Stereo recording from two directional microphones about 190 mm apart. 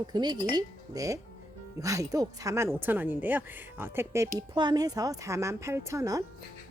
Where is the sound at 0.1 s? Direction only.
20° right (ahead or behind).